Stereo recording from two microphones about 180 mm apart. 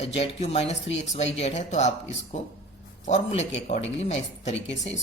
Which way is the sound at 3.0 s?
40° left (ahead or behind).